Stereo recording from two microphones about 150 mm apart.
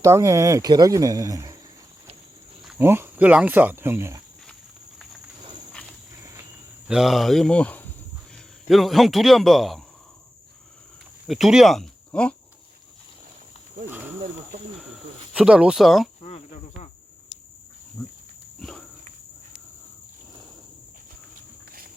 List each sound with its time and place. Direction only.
0.0 s speech: 20° right (ahead or behind)
2.7 s speech: 15° right (ahead or behind)
6.8 s a man's voice: 5° right (ahead or behind)
8.7 s a man's voice: centre (ahead or behind)
11.3 s speech: centre (ahead or behind)
13.9 s cricket: 10° right (ahead or behind)
15.3 s a man's voice: 5° right (ahead or behind)
16.2 s cricket: 50° left (ahead or behind)
18.6 s pig: 5° left (ahead or behind)